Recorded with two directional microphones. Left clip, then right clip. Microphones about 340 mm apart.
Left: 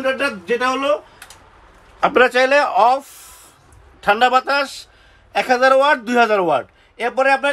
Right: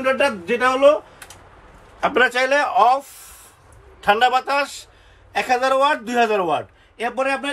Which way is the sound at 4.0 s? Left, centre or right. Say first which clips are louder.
Left 2 dB; left.